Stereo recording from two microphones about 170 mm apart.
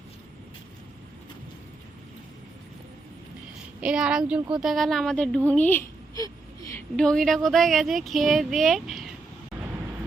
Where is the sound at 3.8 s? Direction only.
5° right (ahead or behind); by 6.3 s 15° left (ahead or behind).